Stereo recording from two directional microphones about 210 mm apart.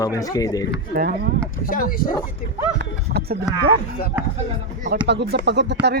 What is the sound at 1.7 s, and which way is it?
Speech, 40° left (ahead or behind).